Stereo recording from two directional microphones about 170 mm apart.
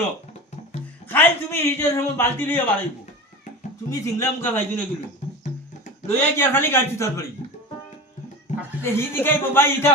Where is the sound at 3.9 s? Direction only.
15° left (ahead or behind).